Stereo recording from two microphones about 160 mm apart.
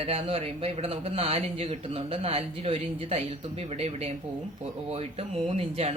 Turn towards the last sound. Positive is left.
turn(degrees=-40)  # may be behind; listen again after turning